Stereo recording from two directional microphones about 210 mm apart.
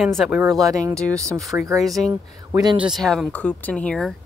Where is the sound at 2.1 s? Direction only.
15° right (ahead or behind).